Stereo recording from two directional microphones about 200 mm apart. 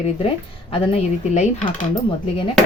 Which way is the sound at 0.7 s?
30° left (ahead or behind).